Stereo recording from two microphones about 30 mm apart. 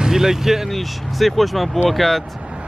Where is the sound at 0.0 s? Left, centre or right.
Centre.